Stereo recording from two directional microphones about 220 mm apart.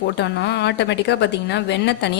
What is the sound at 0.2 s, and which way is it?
A woman's voice, 50° left (ahead or behind).